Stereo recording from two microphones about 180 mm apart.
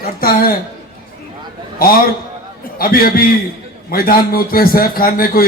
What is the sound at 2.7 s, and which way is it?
A man's voice, 55° left (ahead or behind).